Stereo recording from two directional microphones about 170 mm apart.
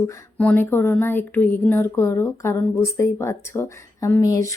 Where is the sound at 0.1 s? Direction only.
10° left (ahead or behind).